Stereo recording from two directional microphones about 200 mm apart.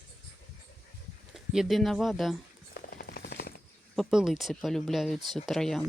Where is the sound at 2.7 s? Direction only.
50° left (ahead or behind).